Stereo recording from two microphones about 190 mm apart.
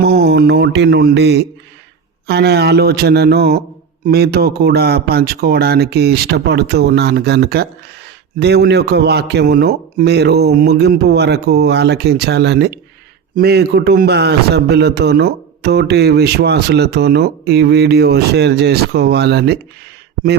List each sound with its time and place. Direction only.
0.0 s a man's voice: 60° right (ahead or behind)